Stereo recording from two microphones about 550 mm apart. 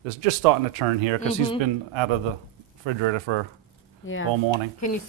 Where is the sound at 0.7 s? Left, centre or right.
Right.